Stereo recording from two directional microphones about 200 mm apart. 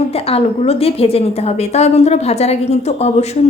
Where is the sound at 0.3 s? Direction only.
30° left (ahead or behind).